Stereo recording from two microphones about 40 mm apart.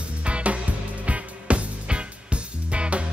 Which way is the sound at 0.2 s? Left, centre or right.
Right.